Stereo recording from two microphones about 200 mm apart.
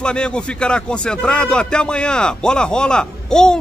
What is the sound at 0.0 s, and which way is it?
Speech, 5° left (ahead or behind).